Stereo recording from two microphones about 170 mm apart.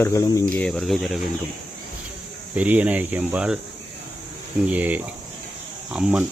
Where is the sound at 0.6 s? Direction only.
5° left (ahead or behind).